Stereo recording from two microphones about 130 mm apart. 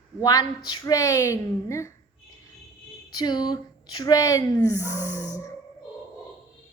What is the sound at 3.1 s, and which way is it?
A woman's voice, 30° left (ahead or behind).